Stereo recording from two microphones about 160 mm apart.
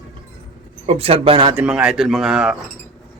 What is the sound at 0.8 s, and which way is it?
Speech, 40° right (ahead or behind).